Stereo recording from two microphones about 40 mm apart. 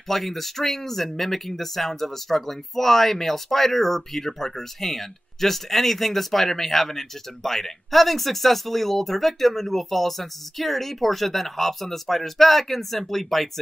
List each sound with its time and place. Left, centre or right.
0.1 s speech: centre